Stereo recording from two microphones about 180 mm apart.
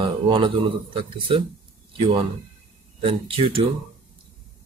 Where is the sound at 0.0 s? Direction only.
30° right (ahead or behind).